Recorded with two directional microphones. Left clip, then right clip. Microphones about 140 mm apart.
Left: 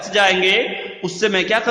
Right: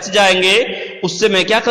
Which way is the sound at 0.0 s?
25° right (ahead or behind).